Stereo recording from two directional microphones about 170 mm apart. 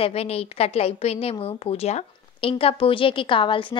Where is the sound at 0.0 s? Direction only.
35° left (ahead or behind).